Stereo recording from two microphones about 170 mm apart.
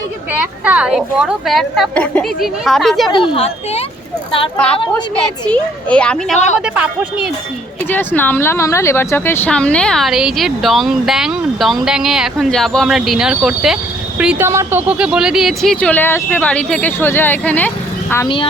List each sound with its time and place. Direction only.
0.3 s speech: 10° right (ahead or behind)
3.1 s speech: 30° left (ahead or behind)
4.5 s a child's voice: 5° left (ahead or behind)
4.8 s a woman's voice: 30° left (ahead or behind)
5.5 s a child's voice: 5° left (ahead or behind)
7.9 s speech: 10° left (ahead or behind)